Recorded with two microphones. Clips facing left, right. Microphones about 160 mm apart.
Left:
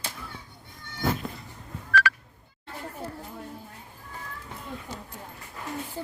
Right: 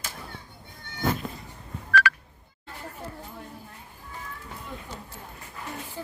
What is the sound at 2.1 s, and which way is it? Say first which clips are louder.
Telephone dialing: right 1 dB; 65° right (ahead or behind).